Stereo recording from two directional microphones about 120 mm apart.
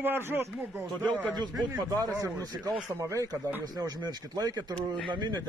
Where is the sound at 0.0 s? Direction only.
15° right (ahead or behind).